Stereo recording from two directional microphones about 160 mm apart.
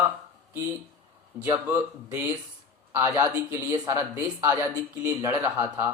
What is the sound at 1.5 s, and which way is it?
A man's voice, 15° right (ahead or behind).